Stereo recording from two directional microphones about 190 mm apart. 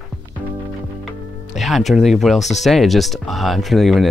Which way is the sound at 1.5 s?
Centre (ahead or behind).